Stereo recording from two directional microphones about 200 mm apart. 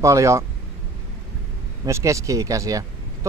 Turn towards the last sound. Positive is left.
turn(degrees=-15)  # may be behind; listen again after turning